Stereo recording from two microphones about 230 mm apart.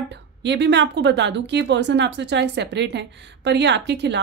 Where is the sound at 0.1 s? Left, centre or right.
Right.